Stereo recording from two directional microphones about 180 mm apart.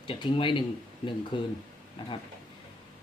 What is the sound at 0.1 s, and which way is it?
Speech, 25° left (ahead or behind).